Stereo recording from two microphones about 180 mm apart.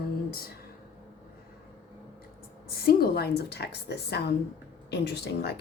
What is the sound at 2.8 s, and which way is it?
Speech, 60° left (ahead or behind).